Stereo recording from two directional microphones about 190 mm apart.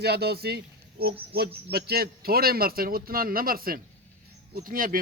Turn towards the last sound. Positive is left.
turn(degrees=-45)  # may be behind; listen again after turning